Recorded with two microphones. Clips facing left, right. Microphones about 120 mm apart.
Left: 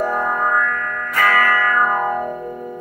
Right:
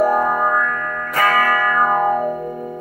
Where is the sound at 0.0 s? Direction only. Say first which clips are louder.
Right 4 dB; 10° right (ahead or behind).